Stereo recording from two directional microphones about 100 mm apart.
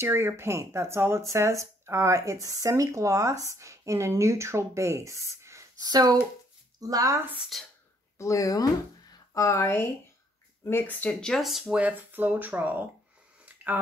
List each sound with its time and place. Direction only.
0.0 s speech: 25° right (ahead or behind)
7.5 s speech: centre (ahead or behind)
8.2 s speech: 35° left (ahead or behind); by 11.6 s centre (ahead or behind)
11.6 s speech: 15° right (ahead or behind)